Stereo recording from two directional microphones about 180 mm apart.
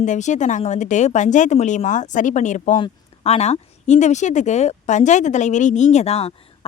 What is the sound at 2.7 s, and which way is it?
Speech, 30° left (ahead or behind).